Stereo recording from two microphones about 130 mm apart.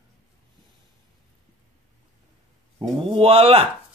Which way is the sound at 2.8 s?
45° right (ahead or behind).